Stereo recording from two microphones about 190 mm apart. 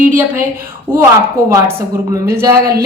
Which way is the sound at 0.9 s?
5° left (ahead or behind).